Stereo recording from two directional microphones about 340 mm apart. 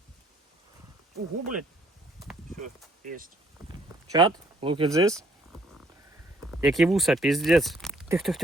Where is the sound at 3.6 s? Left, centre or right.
Centre.